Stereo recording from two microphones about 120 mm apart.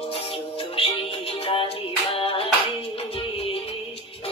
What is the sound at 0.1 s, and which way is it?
Music, 50° left (ahead or behind).